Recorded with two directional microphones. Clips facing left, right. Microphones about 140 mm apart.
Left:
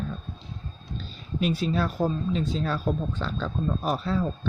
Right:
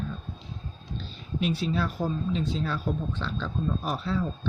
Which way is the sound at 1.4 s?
40° left (ahead or behind).